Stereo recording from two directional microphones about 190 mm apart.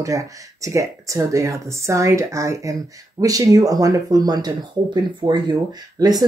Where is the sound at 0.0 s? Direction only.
15° right (ahead or behind).